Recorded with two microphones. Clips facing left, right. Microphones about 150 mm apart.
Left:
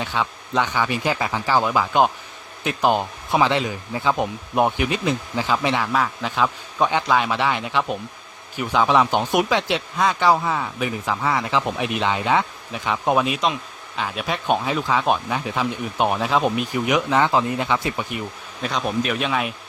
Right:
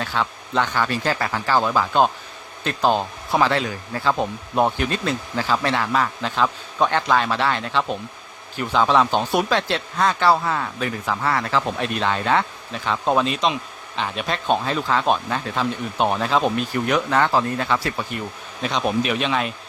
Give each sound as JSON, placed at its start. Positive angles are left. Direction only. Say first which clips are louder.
{"t": 0.0, "sound": "speech", "louder": "even", "side_deg": 15}
{"t": 18.2, "sound": "speech", "louder": "right 1 dB", "side_deg": 0}